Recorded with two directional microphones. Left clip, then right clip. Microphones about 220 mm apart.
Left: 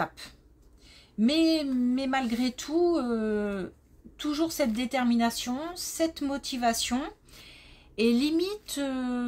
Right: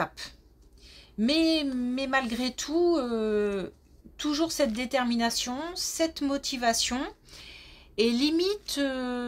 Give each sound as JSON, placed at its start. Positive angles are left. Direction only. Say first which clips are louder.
{"t": 0.0, "sound": "a woman's voice", "louder": "right 1 dB", "side_deg": -30}